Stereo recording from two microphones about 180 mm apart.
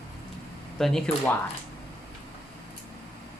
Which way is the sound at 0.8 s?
5° left (ahead or behind).